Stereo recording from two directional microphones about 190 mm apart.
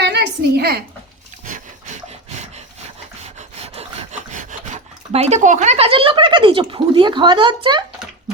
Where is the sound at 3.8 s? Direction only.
40° right (ahead or behind).